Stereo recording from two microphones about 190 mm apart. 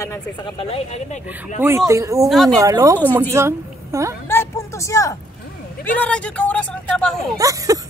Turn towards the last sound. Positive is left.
turn(degrees=-15)  # may be behind; listen again after turning